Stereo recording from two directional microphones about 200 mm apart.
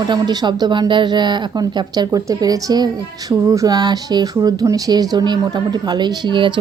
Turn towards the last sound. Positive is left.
turn(degrees=-25)  # may be behind; listen again after turning